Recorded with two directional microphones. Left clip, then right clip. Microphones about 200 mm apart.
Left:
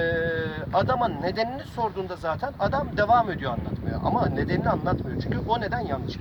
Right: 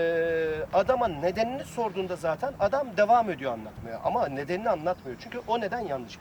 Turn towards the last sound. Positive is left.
turn(degrees=-10)  # may be behind; listen again after turning